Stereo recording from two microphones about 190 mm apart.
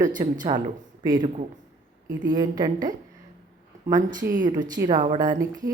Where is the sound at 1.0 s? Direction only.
25° right (ahead or behind).